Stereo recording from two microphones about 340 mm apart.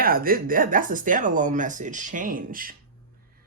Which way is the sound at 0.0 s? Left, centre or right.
Right.